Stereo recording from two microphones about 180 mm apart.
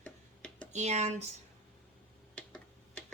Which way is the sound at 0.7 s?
40° right (ahead or behind).